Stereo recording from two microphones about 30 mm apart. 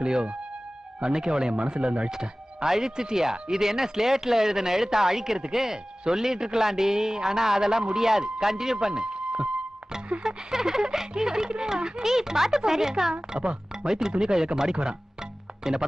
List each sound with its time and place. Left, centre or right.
0.0 s a man's voice: right
2.0 s a man's voice: centre
8.8 s speech: right
10.2 s speech: centre
13.3 s speech: right
13.8 s a man's voice: centre